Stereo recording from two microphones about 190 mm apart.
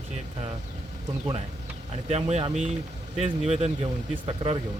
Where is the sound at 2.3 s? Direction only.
35° right (ahead or behind).